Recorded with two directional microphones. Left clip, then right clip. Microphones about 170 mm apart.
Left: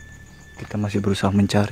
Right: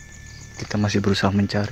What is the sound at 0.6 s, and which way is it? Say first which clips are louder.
Speech: right 2 dB; centre (ahead or behind).